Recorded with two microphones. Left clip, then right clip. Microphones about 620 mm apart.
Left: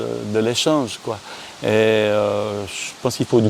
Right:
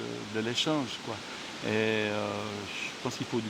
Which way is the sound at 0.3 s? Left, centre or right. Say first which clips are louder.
Left 12 dB; left.